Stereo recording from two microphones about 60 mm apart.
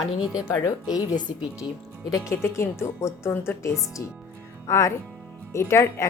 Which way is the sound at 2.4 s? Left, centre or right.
Left.